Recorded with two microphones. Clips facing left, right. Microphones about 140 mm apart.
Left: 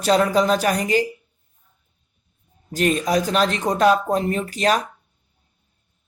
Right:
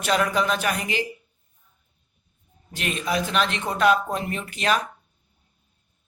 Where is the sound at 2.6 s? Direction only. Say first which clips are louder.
Left 7 dB; 40° left (ahead or behind).